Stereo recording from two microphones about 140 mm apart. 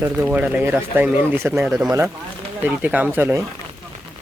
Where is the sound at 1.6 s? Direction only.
5° right (ahead or behind).